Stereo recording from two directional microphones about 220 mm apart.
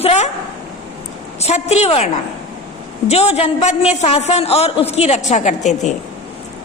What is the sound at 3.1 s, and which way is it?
A man's voice, 30° left (ahead or behind).